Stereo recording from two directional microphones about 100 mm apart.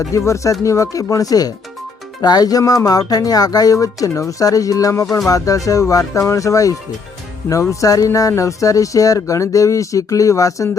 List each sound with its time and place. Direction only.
0.1 s speech: 30° left (ahead or behind)